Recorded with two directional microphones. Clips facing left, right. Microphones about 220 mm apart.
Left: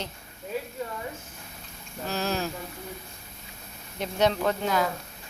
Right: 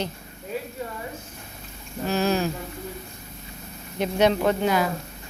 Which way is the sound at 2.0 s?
10° right (ahead or behind).